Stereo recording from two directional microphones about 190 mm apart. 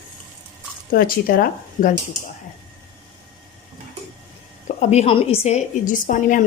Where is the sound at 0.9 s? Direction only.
50° left (ahead or behind).